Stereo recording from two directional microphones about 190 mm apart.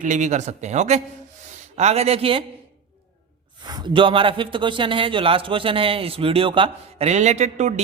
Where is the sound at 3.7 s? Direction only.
20° right (ahead or behind).